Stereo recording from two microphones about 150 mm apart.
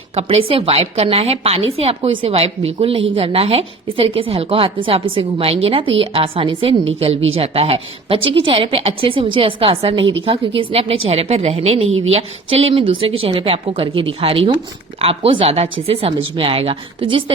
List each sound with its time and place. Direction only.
0.2 s a woman's voice: 40° right (ahead or behind)